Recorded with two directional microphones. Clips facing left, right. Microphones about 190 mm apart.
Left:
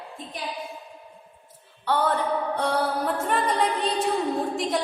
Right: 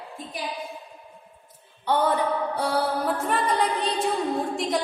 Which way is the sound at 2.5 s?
5° right (ahead or behind).